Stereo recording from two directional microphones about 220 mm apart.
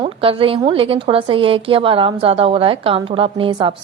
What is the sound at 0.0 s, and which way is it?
A woman's voice, 25° right (ahead or behind).